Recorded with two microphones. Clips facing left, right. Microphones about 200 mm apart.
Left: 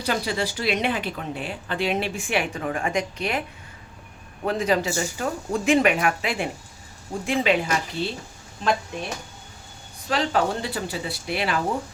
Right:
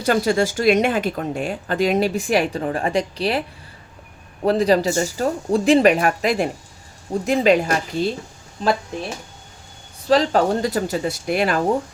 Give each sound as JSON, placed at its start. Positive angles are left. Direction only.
{"t": 0.0, "sound": "speech", "side_deg": -45}
{"t": 4.4, "sound": "speech", "side_deg": -35}
{"t": 10.1, "sound": "speech", "side_deg": -40}